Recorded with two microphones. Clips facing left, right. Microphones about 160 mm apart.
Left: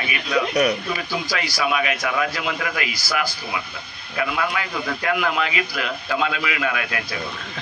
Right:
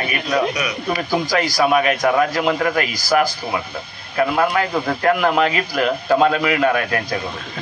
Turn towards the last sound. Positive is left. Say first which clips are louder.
# right 7 dB
turn(degrees=-45)  # may be behind; listen again after turning